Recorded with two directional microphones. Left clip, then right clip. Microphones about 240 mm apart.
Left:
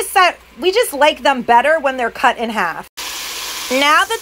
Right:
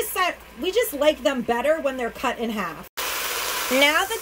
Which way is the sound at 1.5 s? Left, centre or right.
Centre.